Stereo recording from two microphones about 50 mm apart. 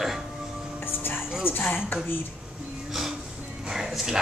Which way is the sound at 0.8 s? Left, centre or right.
Left.